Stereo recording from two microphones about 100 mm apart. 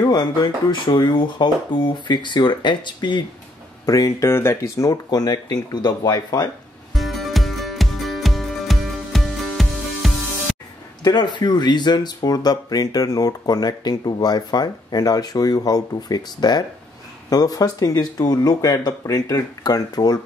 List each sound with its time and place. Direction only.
0.0 s speech: 45° left (ahead or behind)
3.8 s speech: 35° left (ahead or behind)
4.3 s speech: 25° left (ahead or behind); by 6.5 s 40° left (ahead or behind)
6.9 s music: centre (ahead or behind)
11.1 s speech: 45° left (ahead or behind)